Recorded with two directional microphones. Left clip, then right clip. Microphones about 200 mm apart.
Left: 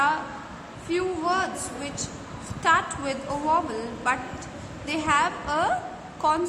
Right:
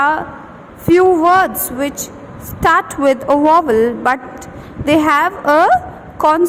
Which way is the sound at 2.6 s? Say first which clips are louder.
Right 11 dB; 45° right (ahead or behind).